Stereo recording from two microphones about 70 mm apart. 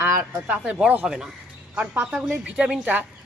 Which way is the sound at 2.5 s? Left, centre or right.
Centre.